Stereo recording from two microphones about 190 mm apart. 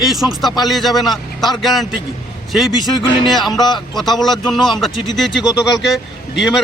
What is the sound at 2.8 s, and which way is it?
Speech, 20° left (ahead or behind).